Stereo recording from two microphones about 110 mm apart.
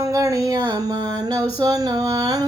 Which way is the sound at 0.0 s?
30° right (ahead or behind).